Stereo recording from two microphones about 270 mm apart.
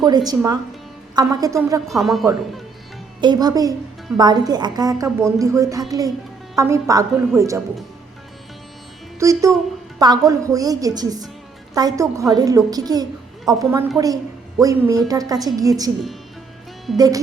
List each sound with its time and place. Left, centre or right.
0.0 s a woman's voice: centre
1.9 s speech: centre
3.2 s a woman's voice: centre
9.1 s a woman's voice: centre